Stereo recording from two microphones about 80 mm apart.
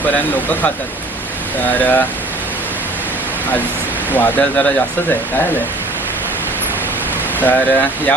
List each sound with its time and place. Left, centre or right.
1.8 s speech: left
4.1 s speech: centre
7.3 s speech: left